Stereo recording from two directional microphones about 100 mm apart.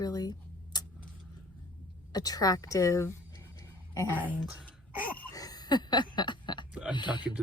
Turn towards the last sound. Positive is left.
turn(degrees=50)  # may be behind; listen again after turning